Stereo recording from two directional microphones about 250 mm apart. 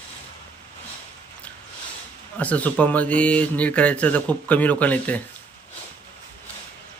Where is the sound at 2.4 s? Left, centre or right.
Centre.